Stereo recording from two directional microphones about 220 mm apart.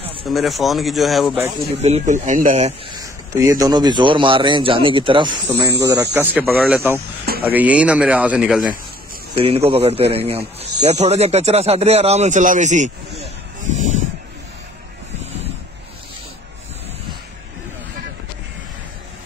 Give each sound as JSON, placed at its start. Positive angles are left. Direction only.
{"t": 0.3, "sound": "speech", "side_deg": 0}
{"t": 1.8, "sound": "speech", "side_deg": -30}
{"t": 2.9, "sound": "speech", "side_deg": -15}
{"t": 9.4, "sound": "speech", "side_deg": -25}
{"t": 13.7, "sound": "a sound", "side_deg": -35}